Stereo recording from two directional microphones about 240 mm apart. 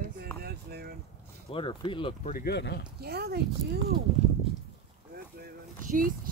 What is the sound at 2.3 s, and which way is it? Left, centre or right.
Speech, left.